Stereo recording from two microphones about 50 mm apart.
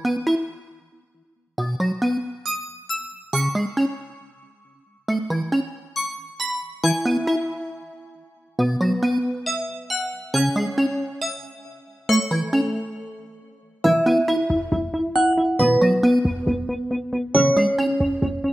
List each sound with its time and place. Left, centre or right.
0.0 s music: centre
1.5 s music: centre
5.0 s music: centre
8.5 s music: centre
10.9 s music: centre
12.1 s music: centre
13.8 s music: centre